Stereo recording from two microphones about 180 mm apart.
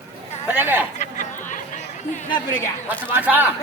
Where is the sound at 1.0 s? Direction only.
45° left (ahead or behind).